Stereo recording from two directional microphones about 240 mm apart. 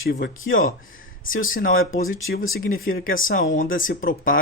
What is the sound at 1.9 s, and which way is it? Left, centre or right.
Speech, left.